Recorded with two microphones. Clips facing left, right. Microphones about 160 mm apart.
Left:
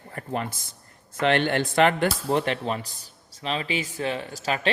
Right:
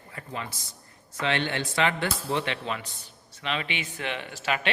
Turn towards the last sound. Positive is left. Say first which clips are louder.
# left 2 dB
turn(degrees=35)  # may be behind; listen again after turning